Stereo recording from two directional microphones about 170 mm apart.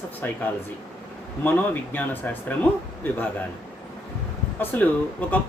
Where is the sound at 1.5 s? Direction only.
10° left (ahead or behind).